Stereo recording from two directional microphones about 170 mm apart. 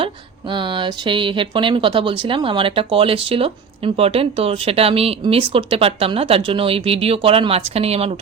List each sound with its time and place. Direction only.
0.0 s speech: 30° right (ahead or behind)